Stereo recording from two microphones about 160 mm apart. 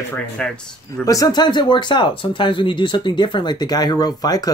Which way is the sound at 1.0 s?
25° left (ahead or behind).